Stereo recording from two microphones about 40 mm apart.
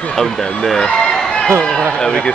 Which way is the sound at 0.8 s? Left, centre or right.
Left.